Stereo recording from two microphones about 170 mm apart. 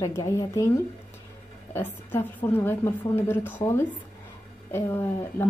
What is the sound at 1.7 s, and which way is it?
A woman's voice, 10° left (ahead or behind).